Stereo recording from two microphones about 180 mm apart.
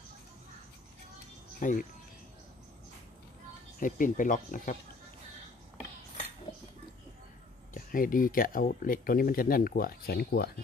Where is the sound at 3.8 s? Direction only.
50° left (ahead or behind).